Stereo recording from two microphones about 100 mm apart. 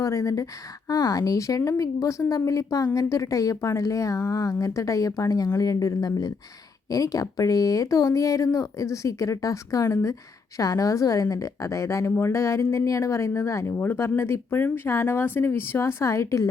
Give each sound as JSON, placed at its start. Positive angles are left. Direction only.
{"t": 0.0, "sound": "a woman's voice", "side_deg": 35}